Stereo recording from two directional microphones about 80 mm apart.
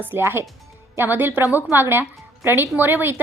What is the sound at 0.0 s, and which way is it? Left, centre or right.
A woman's voice, right.